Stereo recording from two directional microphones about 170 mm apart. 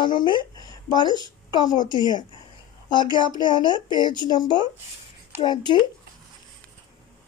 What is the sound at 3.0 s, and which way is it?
Speech, 25° left (ahead or behind).